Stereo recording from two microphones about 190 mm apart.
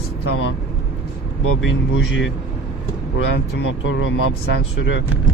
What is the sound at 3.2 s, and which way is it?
Speech, 90° left.